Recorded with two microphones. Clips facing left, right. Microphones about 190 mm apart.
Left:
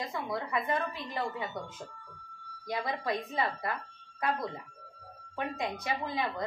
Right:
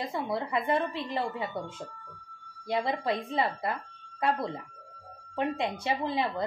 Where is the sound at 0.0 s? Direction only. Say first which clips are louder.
Right 4 dB; 30° right (ahead or behind).